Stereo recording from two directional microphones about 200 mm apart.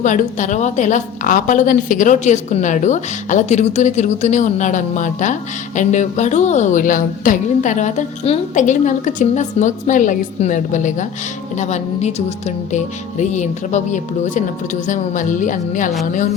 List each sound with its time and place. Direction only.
0.0 s a woman's voice: 40° left (ahead or behind)